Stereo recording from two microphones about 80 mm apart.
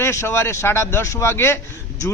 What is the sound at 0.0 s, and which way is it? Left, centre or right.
Speech, left.